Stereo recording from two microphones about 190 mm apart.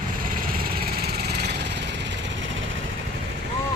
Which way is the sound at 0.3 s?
50° right (ahead or behind).